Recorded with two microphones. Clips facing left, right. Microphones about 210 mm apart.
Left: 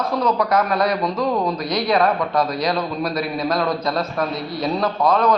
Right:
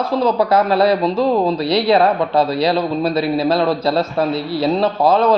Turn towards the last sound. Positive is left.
turn(degrees=-30)  # may be behind; listen again after turning